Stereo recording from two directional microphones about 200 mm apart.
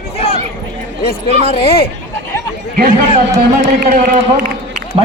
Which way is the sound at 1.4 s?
30° left (ahead or behind).